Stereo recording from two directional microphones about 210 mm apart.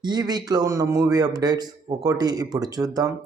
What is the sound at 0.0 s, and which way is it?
Speech, 20° right (ahead or behind).